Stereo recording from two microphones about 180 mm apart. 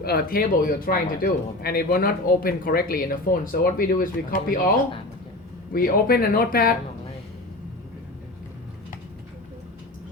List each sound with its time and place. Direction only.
0.0 s speech: 55° left (ahead or behind)
5.7 s speech: 55° left (ahead or behind)